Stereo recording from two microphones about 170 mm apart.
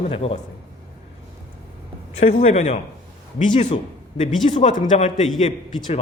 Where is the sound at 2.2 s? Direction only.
50° left (ahead or behind).